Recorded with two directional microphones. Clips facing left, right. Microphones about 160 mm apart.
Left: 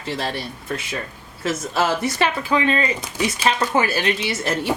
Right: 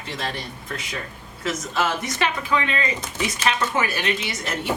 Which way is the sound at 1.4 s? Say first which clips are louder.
Left 3 dB; 30° left (ahead or behind).